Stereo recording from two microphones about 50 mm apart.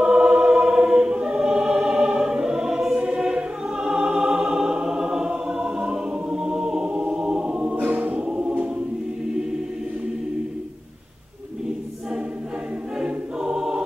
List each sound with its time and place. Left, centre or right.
0.0 s choir: centre
7.7 s choir: right
13.0 s music: centre